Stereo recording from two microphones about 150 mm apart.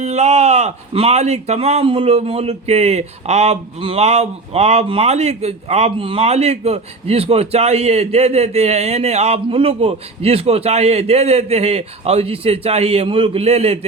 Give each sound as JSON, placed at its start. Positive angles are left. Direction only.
{"t": 0.0, "sound": "speech", "side_deg": -45}